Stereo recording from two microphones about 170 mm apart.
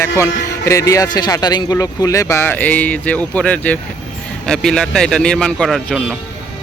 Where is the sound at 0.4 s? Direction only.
20° left (ahead or behind); by 6.1 s centre (ahead or behind).